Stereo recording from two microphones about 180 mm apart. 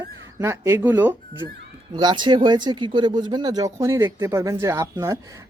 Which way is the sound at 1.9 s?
25° right (ahead or behind).